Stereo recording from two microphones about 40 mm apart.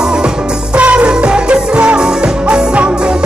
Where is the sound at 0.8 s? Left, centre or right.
Right.